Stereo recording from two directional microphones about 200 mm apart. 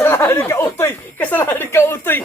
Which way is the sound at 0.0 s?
10° left (ahead or behind).